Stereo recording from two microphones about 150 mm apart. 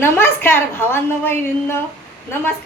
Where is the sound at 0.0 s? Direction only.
15° left (ahead or behind).